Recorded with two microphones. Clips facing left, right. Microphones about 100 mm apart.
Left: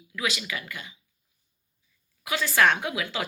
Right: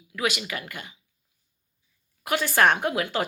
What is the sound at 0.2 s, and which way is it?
Speech, 55° right (ahead or behind).